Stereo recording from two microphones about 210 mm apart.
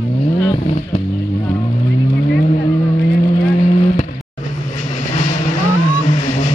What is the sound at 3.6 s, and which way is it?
Vehicle, 35° left (ahead or behind).